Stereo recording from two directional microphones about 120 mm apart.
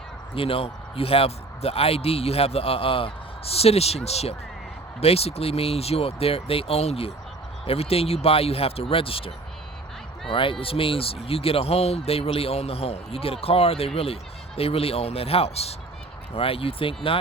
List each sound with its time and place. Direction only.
0.3 s speech: 50° left (ahead or behind)
10.3 s speech: 45° left (ahead or behind)